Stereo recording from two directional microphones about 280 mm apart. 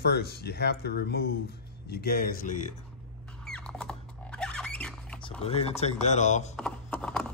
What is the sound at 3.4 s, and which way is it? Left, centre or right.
Rodents, centre.